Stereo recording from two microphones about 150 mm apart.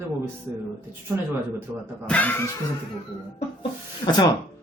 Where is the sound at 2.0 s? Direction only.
10° left (ahead or behind).